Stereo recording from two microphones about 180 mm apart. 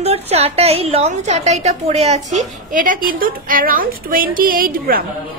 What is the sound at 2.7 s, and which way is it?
A woman's voice, 45° right (ahead or behind).